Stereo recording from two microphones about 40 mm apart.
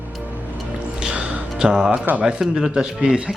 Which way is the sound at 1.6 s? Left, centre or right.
Right.